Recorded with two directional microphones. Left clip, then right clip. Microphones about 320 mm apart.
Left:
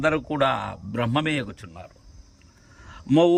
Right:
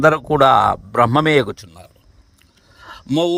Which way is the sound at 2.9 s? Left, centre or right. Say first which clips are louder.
Right 6 dB; right.